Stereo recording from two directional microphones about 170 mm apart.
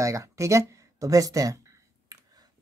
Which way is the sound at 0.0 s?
20° right (ahead or behind).